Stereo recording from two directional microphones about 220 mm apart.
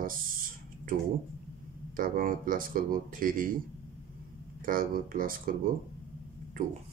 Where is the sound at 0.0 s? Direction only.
40° right (ahead or behind).